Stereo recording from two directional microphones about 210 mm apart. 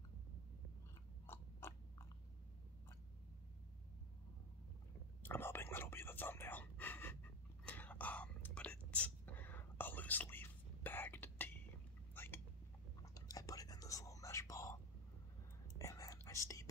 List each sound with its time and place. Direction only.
1.2 s biting: 10° left (ahead or behind)
5.2 s whispering: 10° left (ahead or behind)
13.0 s whispering: 15° left (ahead or behind)